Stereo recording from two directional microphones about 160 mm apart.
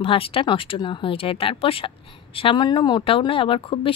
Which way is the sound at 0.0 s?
35° left (ahead or behind).